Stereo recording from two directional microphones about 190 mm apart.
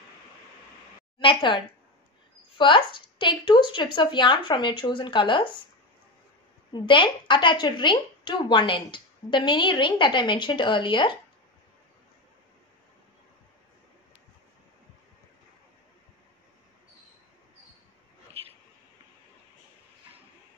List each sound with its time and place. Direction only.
1.2 s a woman's voice: 25° left (ahead or behind)
6.7 s a woman's voice: 25° left (ahead or behind)